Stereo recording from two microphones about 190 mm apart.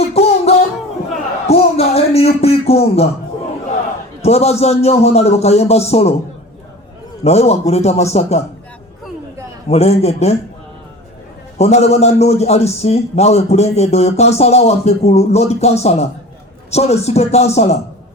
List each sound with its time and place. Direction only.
0.0 s music: 35° left (ahead or behind)
1.5 s a sound: 35° left (ahead or behind)
4.2 s a man's voice: 35° left (ahead or behind)
7.3 s a man's voice: 35° left (ahead or behind)
9.6 s a man's voice: 35° left (ahead or behind)
11.5 s a man's voice: 35° left (ahead or behind)